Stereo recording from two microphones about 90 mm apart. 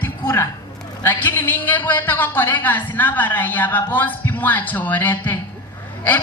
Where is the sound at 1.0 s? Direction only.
25° left (ahead or behind).